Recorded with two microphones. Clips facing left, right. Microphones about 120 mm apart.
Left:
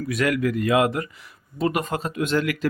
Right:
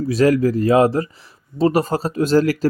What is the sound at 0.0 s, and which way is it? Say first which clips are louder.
Speech: right 7 dB; 30° right (ahead or behind).